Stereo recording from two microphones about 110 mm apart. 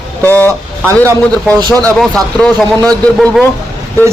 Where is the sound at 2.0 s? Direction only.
Centre (ahead or behind).